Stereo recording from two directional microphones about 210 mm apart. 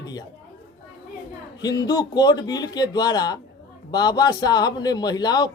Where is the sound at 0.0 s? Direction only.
20° left (ahead or behind).